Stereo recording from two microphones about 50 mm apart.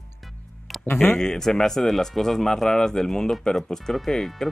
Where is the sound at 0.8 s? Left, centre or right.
Left.